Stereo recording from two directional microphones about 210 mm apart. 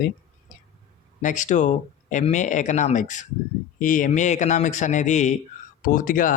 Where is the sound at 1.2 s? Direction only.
35° left (ahead or behind).